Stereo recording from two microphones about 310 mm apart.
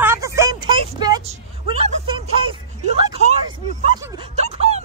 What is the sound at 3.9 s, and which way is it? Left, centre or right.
Speech, centre.